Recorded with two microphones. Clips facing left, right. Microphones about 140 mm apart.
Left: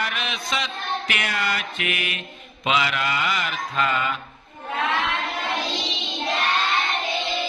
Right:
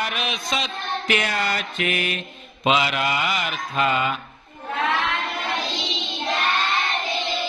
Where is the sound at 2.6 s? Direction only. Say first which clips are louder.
Right 2 dB; 25° right (ahead or behind).